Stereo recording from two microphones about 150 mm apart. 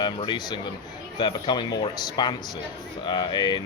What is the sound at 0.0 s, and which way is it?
Speech, 30° left (ahead or behind).